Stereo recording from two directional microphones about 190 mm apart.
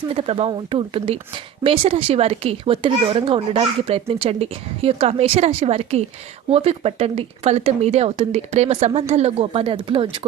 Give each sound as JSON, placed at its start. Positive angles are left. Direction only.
{"t": 0.1, "sound": "a child's voice", "side_deg": -30}